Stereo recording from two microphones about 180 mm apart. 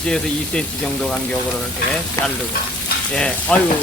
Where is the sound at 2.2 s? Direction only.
20° left (ahead or behind).